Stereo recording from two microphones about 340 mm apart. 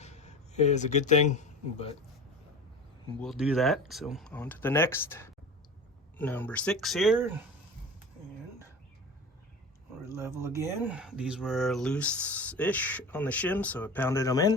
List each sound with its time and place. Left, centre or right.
0.0 s speech: centre
3.2 s speech: centre
10.1 s speech: centre